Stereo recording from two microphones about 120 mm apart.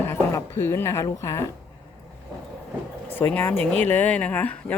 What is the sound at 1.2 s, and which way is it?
Cutlery, 25° left (ahead or behind).